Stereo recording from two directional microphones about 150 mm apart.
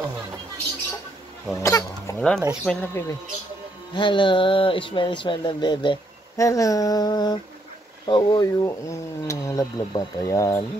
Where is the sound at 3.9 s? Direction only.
30° left (ahead or behind).